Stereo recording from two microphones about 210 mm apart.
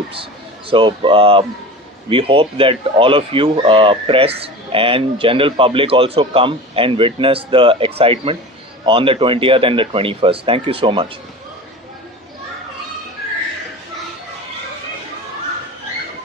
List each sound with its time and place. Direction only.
0.1 s speech: 25° right (ahead or behind)